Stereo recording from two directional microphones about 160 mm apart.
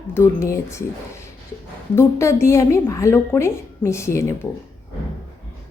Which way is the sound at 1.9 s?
15° left (ahead or behind).